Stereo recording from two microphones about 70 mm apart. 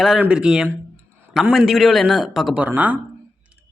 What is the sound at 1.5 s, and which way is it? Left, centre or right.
Speech, centre.